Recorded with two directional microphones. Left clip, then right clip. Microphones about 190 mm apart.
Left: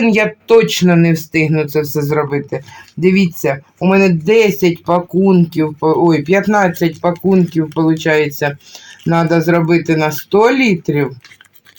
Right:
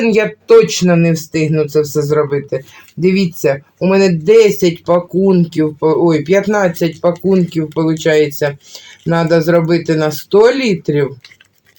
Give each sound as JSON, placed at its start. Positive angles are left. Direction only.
{"t": 0.0, "sound": "speech", "side_deg": -25}